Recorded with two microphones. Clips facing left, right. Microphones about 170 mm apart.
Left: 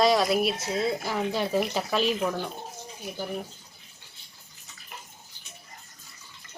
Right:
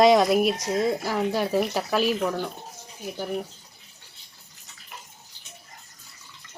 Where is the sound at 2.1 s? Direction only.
5° left (ahead or behind).